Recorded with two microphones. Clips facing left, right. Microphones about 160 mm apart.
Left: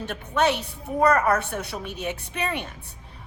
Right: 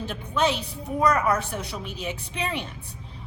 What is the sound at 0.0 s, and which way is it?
A woman's voice, 65° left (ahead or behind).